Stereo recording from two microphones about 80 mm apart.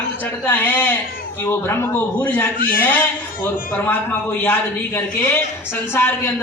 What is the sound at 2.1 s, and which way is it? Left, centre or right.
Speech, centre.